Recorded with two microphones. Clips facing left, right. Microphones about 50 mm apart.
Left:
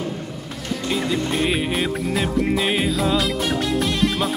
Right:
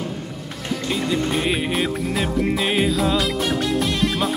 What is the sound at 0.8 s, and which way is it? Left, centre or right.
Music, centre.